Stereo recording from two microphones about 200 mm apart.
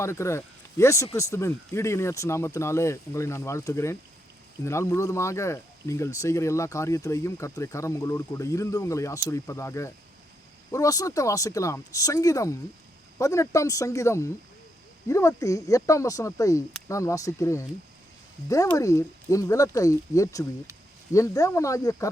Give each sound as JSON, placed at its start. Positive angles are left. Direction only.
{"t": 0.0, "sound": "speech", "side_deg": 15}